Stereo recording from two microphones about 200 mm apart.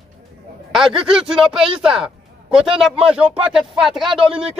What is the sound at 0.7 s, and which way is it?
Speech, centre (ahead or behind).